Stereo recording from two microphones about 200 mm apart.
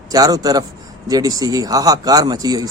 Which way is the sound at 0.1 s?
20° right (ahead or behind).